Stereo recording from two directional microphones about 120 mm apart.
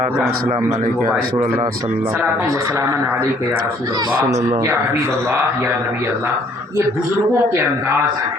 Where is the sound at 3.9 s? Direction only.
35° right (ahead or behind).